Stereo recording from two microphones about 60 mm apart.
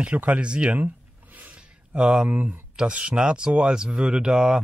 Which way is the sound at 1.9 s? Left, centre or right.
Centre.